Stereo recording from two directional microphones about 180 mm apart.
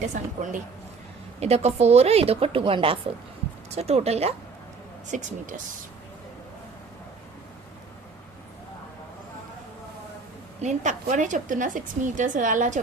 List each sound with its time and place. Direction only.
0.1 s a woman's voice: 45° right (ahead or behind)
10.6 s a woman's voice: 40° right (ahead or behind)